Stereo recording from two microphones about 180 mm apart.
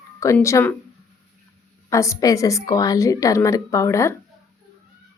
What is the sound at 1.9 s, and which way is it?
A woman's voice, 15° left (ahead or behind).